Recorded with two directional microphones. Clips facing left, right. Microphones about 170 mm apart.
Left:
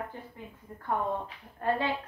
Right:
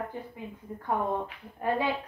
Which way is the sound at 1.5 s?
15° right (ahead or behind).